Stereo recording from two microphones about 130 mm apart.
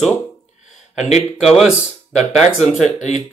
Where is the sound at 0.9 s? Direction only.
55° left (ahead or behind).